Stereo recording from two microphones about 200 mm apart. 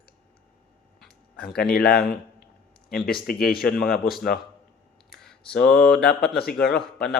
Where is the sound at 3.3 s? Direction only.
Centre (ahead or behind).